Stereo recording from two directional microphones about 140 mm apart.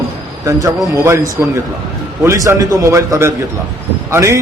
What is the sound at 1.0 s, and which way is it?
A man's voice, 20° right (ahead or behind).